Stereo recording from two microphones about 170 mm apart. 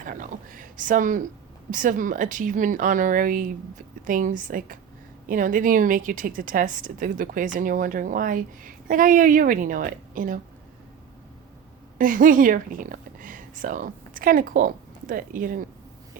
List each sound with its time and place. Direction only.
0.0 s a woman's voice: 50° right (ahead or behind)
11.9 s speech: 50° right (ahead or behind)